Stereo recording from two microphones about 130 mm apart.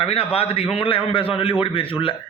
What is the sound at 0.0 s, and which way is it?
A man's voice, 50° left (ahead or behind).